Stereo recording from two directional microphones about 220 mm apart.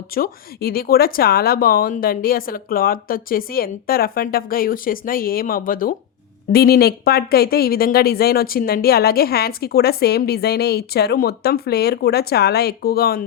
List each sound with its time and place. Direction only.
0.1 s speech: 45° left (ahead or behind)